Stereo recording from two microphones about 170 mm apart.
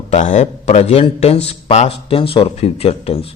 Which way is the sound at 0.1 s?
45° left (ahead or behind).